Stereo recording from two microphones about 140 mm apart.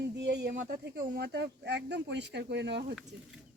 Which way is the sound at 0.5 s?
90° right.